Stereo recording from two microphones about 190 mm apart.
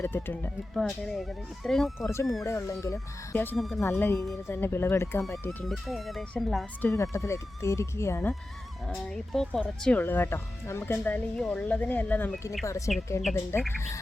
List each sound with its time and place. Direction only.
0.0 s speech: 10° left (ahead or behind)
2.4 s speech: 15° left (ahead or behind)
5.5 s speech: centre (ahead or behind)
6.9 s speech: 15° left (ahead or behind)